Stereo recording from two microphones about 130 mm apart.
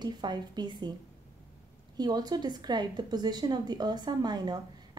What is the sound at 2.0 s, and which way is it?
A woman's voice, 30° right (ahead or behind).